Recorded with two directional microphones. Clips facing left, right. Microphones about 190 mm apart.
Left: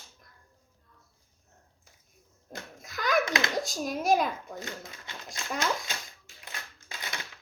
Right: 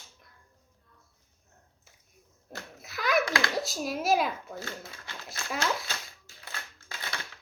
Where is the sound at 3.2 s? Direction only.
20° left (ahead or behind).